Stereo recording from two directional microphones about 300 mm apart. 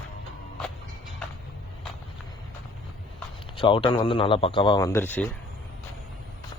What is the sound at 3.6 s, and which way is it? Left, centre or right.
Speech, centre.